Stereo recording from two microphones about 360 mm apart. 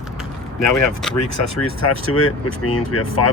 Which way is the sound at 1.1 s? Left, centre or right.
Left.